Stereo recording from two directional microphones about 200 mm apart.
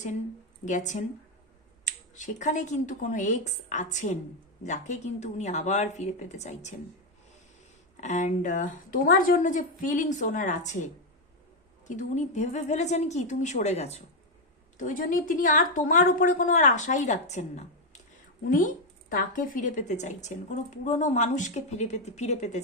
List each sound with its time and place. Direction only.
0.6 s a woman's voice: 35° left (ahead or behind)
8.0 s a woman's voice: 35° left (ahead or behind)
11.9 s a woman's voice: 35° left (ahead or behind)